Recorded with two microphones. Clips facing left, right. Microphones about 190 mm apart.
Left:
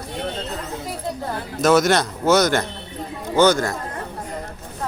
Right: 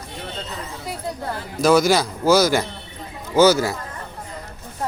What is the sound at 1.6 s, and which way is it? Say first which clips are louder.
Speech: even; centre (ahead or behind).